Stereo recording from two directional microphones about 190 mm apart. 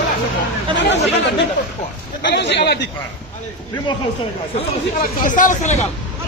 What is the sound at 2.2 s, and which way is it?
Speech, 65° left (ahead or behind).